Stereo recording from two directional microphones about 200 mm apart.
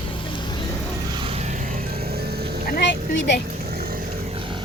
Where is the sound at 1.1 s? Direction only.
30° right (ahead or behind); by 2.6 s 50° right (ahead or behind).